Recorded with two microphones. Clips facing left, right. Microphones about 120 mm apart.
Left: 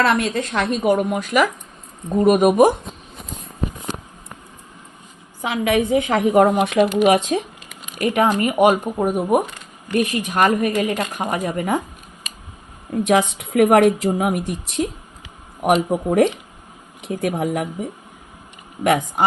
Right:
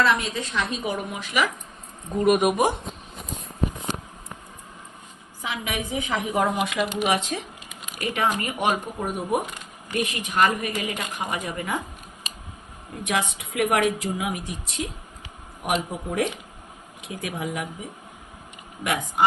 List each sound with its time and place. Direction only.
0.0 s a woman's voice: 55° left (ahead or behind)
2.1 s a woman's voice: 35° left (ahead or behind)
5.4 s a woman's voice: 60° left (ahead or behind)
7.9 s a woman's voice: 45° left (ahead or behind)
13.1 s a woman's voice: 55° left (ahead or behind)
15.9 s speech: 50° left (ahead or behind)